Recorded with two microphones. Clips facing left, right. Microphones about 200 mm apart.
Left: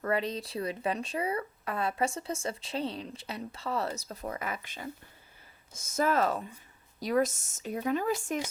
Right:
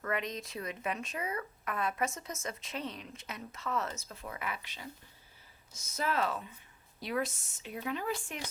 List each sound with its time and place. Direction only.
0.0 s speech: 35° left (ahead or behind)